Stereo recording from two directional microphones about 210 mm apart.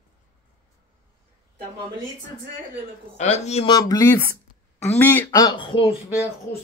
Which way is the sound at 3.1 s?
35° left (ahead or behind).